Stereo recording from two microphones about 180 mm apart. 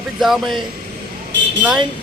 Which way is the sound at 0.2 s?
Centre (ahead or behind).